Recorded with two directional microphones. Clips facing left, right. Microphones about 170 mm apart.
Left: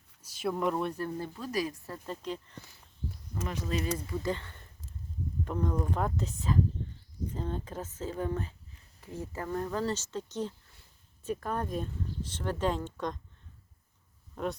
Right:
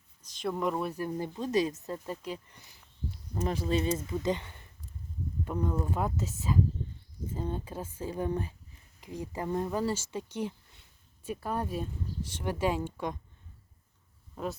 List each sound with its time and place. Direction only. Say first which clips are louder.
0.2 s speech: left 1 dB; 5° left (ahead or behind); by 2.0 s 20° right (ahead or behind)
2.0 s speech: even; 10° right (ahead or behind)
3.4 s speech: right 4 dB; 30° right (ahead or behind); by 13.1 s 10° right (ahead or behind)
14.4 s speech: left 2 dB; 5° right (ahead or behind)